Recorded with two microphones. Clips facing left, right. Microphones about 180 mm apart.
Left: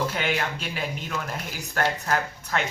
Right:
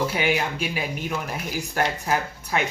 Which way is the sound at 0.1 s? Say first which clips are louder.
Right 3 dB; 10° right (ahead or behind).